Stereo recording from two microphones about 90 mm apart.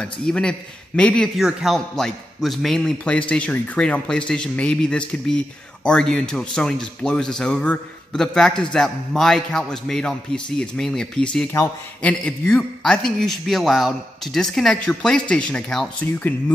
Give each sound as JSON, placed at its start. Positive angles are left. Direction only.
{"t": 0.0, "sound": "speech", "side_deg": 10}
{"t": 1.3, "sound": "speech", "side_deg": 0}
{"t": 16.0, "sound": "speech", "side_deg": 15}